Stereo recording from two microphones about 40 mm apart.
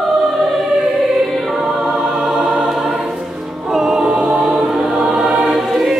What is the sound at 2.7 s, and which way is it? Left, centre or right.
Choir, centre.